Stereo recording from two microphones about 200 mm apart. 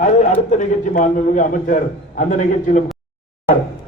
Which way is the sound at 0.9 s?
40° left (ahead or behind).